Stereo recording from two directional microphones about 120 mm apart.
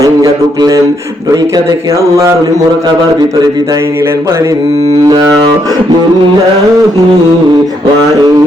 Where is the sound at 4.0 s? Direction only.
25° right (ahead or behind).